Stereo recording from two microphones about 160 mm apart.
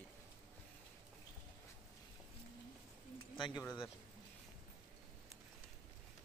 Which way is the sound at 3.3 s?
30° left (ahead or behind).